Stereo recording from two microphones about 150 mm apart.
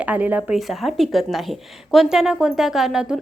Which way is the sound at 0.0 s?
10° right (ahead or behind).